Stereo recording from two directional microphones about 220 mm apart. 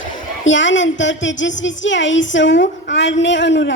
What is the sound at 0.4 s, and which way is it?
A woman's voice, 55° left (ahead or behind).